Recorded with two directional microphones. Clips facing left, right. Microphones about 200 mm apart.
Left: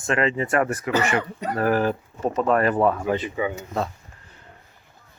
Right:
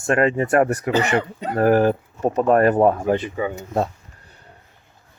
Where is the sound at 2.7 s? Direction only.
30° right (ahead or behind).